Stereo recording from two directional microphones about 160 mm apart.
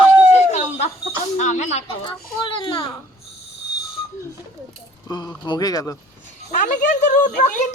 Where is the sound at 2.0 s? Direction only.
30° left (ahead or behind).